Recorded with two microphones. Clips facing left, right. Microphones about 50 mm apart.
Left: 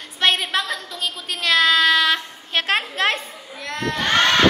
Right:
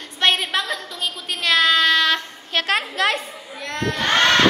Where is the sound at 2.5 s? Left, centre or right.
Left.